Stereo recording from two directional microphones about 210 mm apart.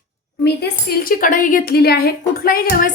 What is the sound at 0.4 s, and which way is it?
A woman's voice, 45° left (ahead or behind).